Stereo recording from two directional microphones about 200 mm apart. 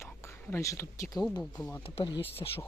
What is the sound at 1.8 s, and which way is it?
Speech, 25° left (ahead or behind).